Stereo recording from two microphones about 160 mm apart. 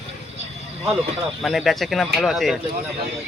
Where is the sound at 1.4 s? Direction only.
Centre (ahead or behind).